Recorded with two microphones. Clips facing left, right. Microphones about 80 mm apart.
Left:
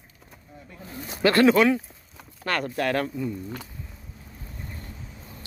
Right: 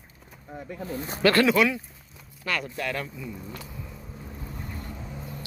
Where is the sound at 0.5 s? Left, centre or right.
Right.